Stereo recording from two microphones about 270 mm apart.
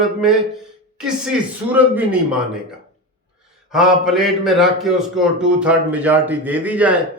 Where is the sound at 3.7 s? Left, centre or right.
Centre.